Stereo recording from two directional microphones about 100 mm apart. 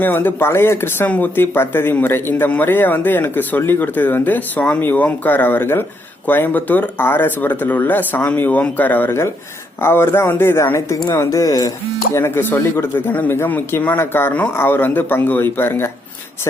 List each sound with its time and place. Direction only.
0.0 s speech: 20° left (ahead or behind); by 11.7 s 35° left (ahead or behind)
12.1 s speech: 25° left (ahead or behind)